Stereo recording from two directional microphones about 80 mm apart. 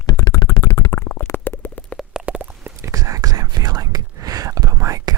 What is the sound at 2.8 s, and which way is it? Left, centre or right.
Whispering, right.